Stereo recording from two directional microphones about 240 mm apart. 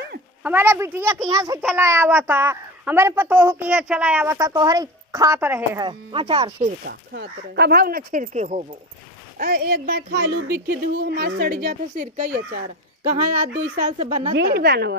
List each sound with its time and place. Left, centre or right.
0.4 s a child's voice: centre
5.9 s speech: right
6.6 s speech: right
9.4 s speech: right
13.9 s speech: right
14.3 s a woman's voice: right